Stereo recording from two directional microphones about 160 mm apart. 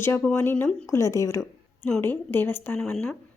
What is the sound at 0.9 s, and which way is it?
Speech, 20° left (ahead or behind).